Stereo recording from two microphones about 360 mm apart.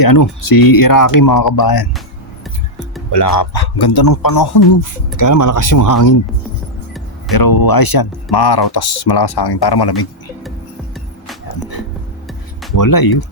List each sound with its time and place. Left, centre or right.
0.0 s a man's voice: left
3.1 s a man's voice: left
7.3 s speech: left
12.7 s speech: left